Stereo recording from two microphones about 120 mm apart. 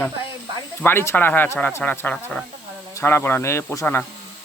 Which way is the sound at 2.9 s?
20° left (ahead or behind).